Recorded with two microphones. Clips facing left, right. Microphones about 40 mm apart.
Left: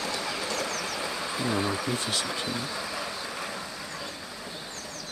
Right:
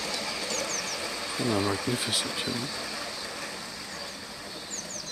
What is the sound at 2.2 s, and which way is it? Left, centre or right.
Speech, centre.